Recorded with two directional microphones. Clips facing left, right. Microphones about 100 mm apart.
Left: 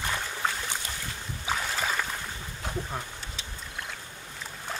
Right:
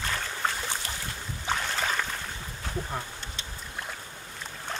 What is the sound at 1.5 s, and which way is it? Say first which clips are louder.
Boat: right 1 dB; 5° left (ahead or behind).